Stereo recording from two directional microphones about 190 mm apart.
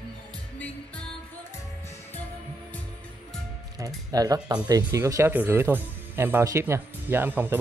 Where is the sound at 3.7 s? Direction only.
20° right (ahead or behind).